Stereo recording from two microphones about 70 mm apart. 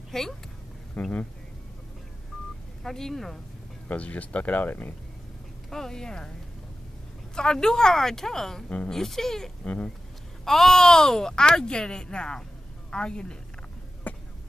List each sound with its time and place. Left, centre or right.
0.1 s speech: centre
1.0 s speech: left
2.8 s speech: centre
3.9 s speech: centre
5.7 s speech: centre
7.3 s speech: centre
8.6 s speech: centre
8.9 s speech: centre
14.0 s a sound: left